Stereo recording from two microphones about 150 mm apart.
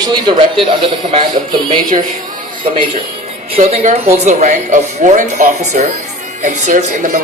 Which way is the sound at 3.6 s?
50° right (ahead or behind).